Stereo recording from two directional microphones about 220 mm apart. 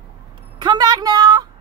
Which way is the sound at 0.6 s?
20° right (ahead or behind).